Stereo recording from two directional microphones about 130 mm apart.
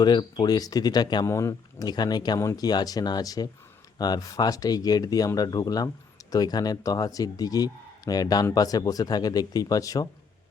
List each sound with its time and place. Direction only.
0.0 s a man's voice: 35° left (ahead or behind)